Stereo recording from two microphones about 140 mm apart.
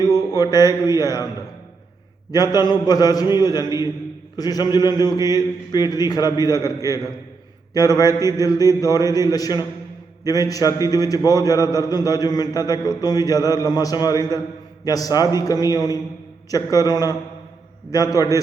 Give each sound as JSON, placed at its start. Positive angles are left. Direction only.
{"t": 0.0, "sound": "mantra", "side_deg": -20}
{"t": 0.3, "sound": "a man's voice", "side_deg": 25}
{"t": 2.3, "sound": "a man's voice", "side_deg": 30}